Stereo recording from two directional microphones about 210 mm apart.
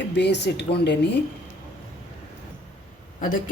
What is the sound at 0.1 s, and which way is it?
Speech, 55° left (ahead or behind).